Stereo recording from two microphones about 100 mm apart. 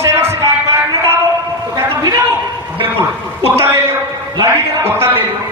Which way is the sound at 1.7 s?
35° right (ahead or behind).